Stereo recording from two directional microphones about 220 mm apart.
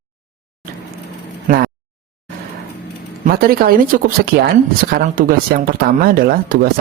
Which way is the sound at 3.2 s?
40° right (ahead or behind).